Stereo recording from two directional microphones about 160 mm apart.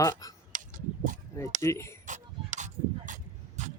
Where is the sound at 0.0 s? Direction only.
20° left (ahead or behind).